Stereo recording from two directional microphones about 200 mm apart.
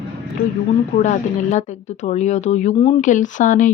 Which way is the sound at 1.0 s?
35° left (ahead or behind).